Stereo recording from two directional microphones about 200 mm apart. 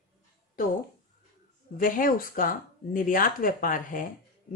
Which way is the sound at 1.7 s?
45° left (ahead or behind).